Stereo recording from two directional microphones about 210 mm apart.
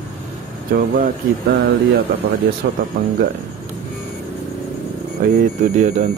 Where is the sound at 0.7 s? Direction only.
45° right (ahead or behind).